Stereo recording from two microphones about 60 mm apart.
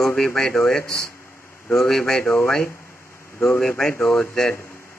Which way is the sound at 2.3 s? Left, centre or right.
Centre.